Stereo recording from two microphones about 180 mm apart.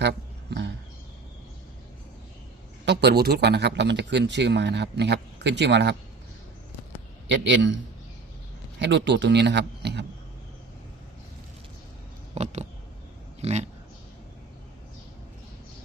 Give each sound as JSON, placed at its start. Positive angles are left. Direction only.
{"t": 0.0, "sound": "a sound", "side_deg": -70}
{"t": 2.8, "sound": "speech", "side_deg": -65}
{"t": 7.4, "sound": "a man's voice", "side_deg": -90}
{"t": 8.8, "sound": "speech", "side_deg": -75}
{"t": 12.3, "sound": "a sound", "side_deg": -40}
{"t": 13.4, "sound": "speech", "side_deg": -35}